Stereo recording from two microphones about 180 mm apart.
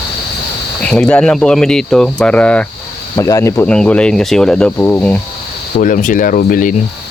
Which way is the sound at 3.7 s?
5° left (ahead or behind).